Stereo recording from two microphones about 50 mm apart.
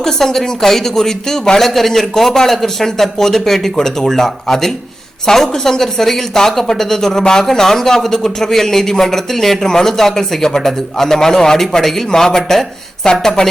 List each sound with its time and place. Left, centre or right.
0.0 s a woman's voice: centre